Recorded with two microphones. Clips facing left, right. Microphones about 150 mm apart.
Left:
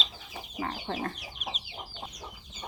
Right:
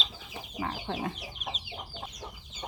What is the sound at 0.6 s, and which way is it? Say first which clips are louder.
Chicken: even; centre (ahead or behind).